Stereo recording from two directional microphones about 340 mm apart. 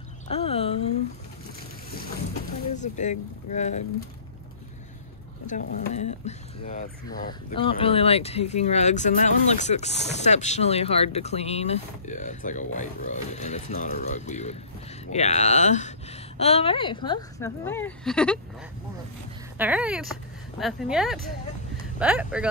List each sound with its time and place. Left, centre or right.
0.3 s a sound: centre
2.7 s speech: left
5.5 s speech: centre
19.6 s speech: centre